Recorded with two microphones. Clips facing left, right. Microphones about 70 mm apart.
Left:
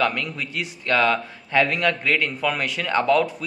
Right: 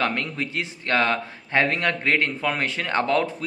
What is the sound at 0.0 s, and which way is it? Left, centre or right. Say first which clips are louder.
A man's voice: left 1 dB; right.